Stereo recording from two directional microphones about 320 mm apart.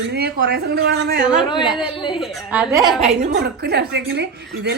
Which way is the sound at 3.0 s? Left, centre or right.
Right.